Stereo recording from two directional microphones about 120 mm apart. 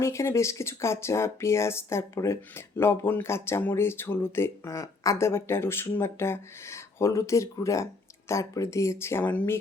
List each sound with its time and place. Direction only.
0.0 s speech: 25° left (ahead or behind)